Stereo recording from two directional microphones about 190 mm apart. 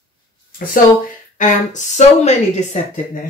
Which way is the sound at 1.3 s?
40° left (ahead or behind).